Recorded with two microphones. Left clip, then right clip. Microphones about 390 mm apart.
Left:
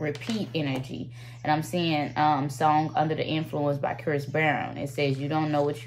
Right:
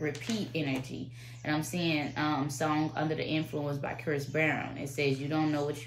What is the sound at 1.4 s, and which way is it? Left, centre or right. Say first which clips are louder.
Speech: left 6 dB; left.